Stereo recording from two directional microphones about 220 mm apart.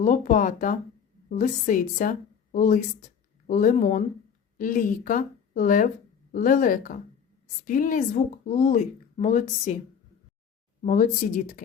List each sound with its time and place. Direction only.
0.0 s a woman's voice: 35° left (ahead or behind)
10.8 s a woman's voice: 35° left (ahead or behind)